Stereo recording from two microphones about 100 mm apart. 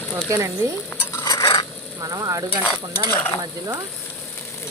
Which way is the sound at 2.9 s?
45° right (ahead or behind).